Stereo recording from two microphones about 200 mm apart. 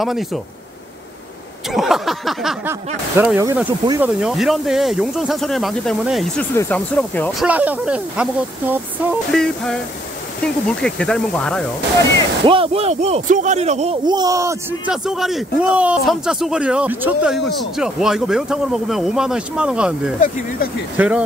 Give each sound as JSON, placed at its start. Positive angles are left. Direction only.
{"t": 0.0, "sound": "speech", "side_deg": 0}
{"t": 1.7, "sound": "a sound", "side_deg": 0}
{"t": 3.2, "sound": "speech", "side_deg": -15}
{"t": 4.0, "sound": "speech", "side_deg": 0}
{"t": 7.4, "sound": "speech", "side_deg": -10}
{"t": 9.3, "sound": "speech", "side_deg": 0}
{"t": 12.4, "sound": "speech", "side_deg": -25}
{"t": 14.0, "sound": "speech", "side_deg": -20}
{"t": 14.9, "sound": "speech", "side_deg": 0}
{"t": 21.0, "sound": "speech", "side_deg": -10}